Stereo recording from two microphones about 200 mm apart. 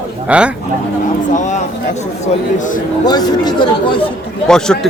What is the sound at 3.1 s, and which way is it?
Speech, 20° left (ahead or behind).